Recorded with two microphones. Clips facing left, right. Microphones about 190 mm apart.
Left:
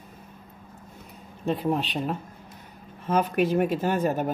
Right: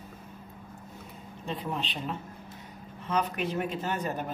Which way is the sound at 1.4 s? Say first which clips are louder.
Left 9 dB; 45° left (ahead or behind).